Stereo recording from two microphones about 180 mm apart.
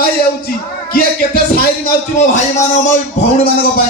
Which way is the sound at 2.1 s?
45° left (ahead or behind).